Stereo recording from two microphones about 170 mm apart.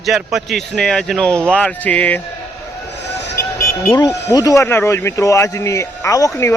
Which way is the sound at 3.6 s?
20° left (ahead or behind).